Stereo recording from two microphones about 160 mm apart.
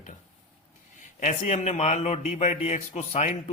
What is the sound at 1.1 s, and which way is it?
Speech, 50° left (ahead or behind).